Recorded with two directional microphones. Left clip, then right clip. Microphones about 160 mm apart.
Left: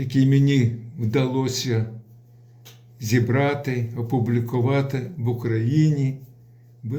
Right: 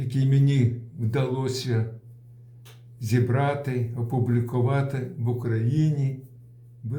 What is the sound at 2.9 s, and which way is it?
Speech, 5° left (ahead or behind).